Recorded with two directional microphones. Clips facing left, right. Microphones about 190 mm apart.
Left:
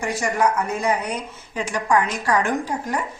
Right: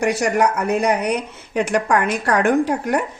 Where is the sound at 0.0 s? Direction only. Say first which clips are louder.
Right 4 dB; 70° right (ahead or behind).